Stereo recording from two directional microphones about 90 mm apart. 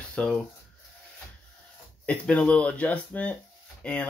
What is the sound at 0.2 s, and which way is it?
Speech, 15° left (ahead or behind).